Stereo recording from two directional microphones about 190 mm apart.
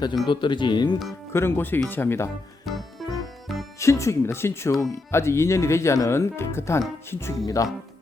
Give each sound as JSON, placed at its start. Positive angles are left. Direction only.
{"t": 0.3, "sound": "speech", "side_deg": 25}
{"t": 1.3, "sound": "speech", "side_deg": 10}
{"t": 2.6, "sound": "music", "side_deg": 0}
{"t": 3.8, "sound": "speech", "side_deg": 15}